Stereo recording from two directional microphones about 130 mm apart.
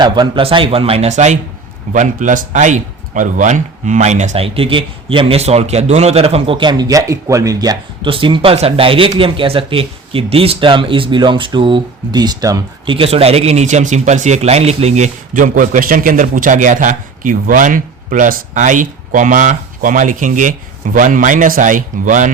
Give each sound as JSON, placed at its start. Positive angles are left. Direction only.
{"t": 0.0, "sound": "speech", "side_deg": -40}
{"t": 1.9, "sound": "speech", "side_deg": -75}
{"t": 8.1, "sound": "speech", "side_deg": -45}
{"t": 12.9, "sound": "speech", "side_deg": -45}